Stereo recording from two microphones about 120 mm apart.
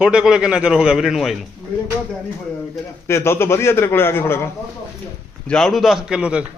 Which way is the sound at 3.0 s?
20° left (ahead or behind).